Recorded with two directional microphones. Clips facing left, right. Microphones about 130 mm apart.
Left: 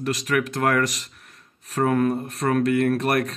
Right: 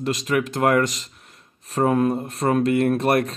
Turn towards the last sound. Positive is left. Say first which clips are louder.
# right 2 dB
turn(degrees=-25)  # may be behind; listen again after turning